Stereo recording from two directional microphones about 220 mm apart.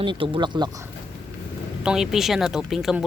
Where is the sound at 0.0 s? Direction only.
20° right (ahead or behind).